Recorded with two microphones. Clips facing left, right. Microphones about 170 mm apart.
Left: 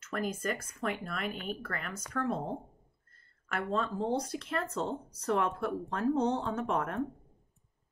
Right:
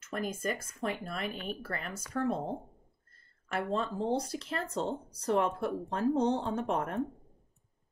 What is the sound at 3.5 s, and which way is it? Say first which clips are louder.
Speech: even; 30° right (ahead or behind).